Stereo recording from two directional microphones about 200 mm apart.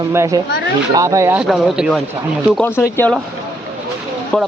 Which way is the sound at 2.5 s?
10° left (ahead or behind).